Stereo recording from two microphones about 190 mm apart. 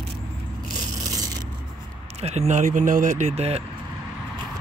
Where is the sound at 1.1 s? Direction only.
20° right (ahead or behind).